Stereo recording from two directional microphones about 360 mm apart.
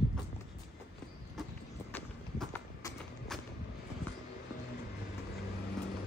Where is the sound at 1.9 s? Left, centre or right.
Centre.